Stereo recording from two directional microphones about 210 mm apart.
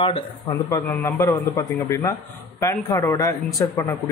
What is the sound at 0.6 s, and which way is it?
A man's voice, 15° left (ahead or behind).